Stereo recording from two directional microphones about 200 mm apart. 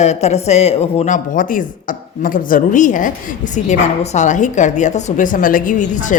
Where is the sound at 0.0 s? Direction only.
35° left (ahead or behind).